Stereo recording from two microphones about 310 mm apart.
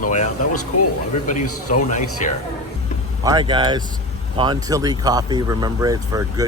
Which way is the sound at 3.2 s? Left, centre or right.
Centre.